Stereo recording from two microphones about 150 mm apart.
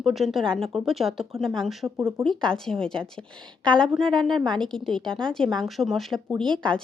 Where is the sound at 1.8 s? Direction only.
20° right (ahead or behind).